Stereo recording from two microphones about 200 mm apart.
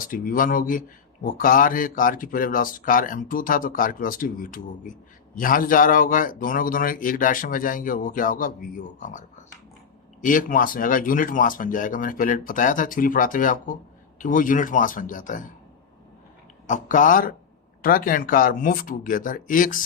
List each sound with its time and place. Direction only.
0.0 s a man's voice: 45° left (ahead or behind)
16.6 s a man's voice: 40° left (ahead or behind)